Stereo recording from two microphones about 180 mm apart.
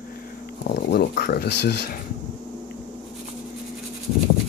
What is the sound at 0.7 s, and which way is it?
Speech, 60° left (ahead or behind).